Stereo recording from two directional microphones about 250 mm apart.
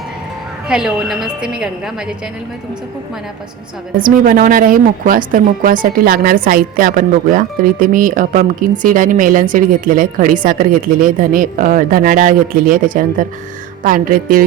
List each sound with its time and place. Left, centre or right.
0.7 s a woman's voice: centre
4.0 s a woman's voice: right